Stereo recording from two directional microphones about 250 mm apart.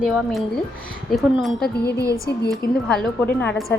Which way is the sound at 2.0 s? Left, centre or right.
Centre.